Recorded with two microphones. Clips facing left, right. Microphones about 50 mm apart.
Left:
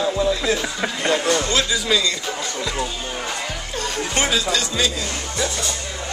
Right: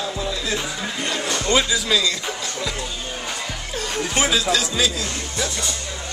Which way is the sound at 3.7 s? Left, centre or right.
Centre.